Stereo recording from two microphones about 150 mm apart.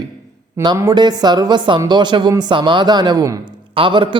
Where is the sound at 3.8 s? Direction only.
35° right (ahead or behind).